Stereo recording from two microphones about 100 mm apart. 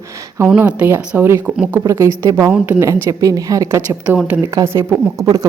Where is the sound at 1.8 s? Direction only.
35° right (ahead or behind).